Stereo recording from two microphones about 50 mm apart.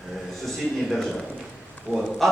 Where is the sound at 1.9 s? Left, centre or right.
Right.